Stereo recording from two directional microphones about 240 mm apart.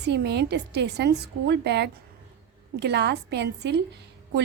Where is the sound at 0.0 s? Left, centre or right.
Right.